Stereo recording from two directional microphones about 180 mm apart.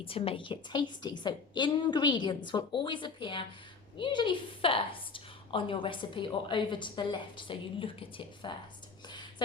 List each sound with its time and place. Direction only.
0.0 s a woman's voice: 30° left (ahead or behind)